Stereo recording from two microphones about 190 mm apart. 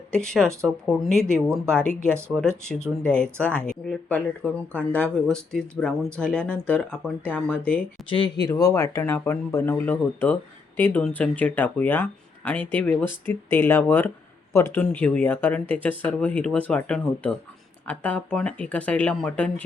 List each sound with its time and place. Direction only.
0.1 s speech: 5° left (ahead or behind)
2.1 s speech: 15° right (ahead or behind)
3.0 s speech: 5° left (ahead or behind)
8.1 s speech: 25° left (ahead or behind); by 19.6 s 5° left (ahead or behind)